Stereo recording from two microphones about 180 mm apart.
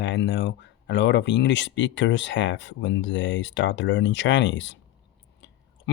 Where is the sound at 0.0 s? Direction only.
80° left.